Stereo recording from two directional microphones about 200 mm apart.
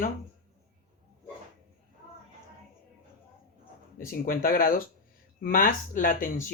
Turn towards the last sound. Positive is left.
turn(degrees=45)  # may be behind; listen again after turning